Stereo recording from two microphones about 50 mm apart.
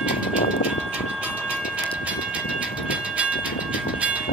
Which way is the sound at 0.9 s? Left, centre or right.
Right.